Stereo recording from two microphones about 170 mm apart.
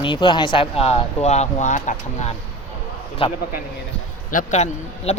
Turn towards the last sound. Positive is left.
turn(degrees=40)  # may be behind; listen again after turning